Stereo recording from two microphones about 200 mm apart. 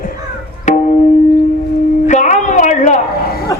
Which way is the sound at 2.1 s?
35° left (ahead or behind).